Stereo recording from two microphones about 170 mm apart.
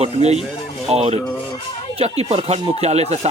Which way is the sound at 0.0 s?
40° right (ahead or behind).